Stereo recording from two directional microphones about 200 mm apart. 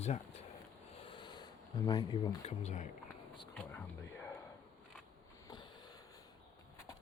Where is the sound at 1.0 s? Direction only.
25° left (ahead or behind).